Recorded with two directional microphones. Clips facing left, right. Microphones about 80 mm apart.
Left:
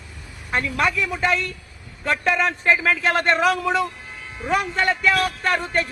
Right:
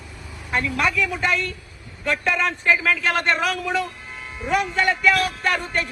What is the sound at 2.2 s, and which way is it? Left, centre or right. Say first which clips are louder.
A man's voice: left 2 dB; left.